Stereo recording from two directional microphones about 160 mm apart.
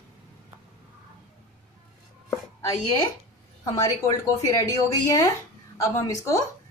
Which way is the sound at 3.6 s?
20° left (ahead or behind).